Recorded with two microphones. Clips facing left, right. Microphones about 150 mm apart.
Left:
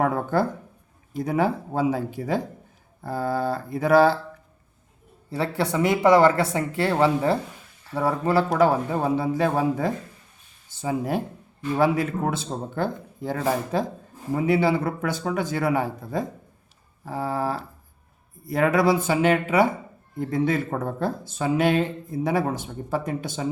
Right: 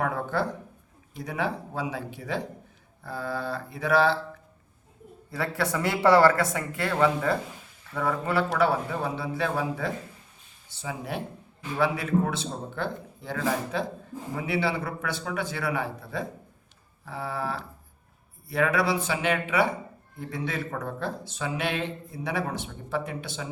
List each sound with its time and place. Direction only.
0.0 s a sound: 40° left (ahead or behind)
1.2 s a man's voice: 45° left (ahead or behind)
5.3 s a man's voice: 30° left (ahead or behind); by 23.5 s 45° left (ahead or behind)